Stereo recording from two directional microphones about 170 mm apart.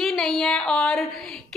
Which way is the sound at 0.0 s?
Centre (ahead or behind).